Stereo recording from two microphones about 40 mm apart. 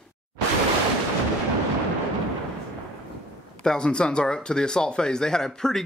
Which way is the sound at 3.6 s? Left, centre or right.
Left.